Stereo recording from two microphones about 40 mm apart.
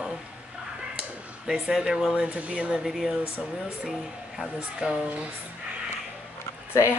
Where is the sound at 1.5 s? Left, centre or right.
Centre.